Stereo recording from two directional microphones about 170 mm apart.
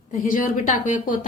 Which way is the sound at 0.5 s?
45° left (ahead or behind).